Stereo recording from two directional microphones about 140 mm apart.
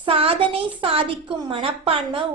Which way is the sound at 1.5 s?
40° right (ahead or behind).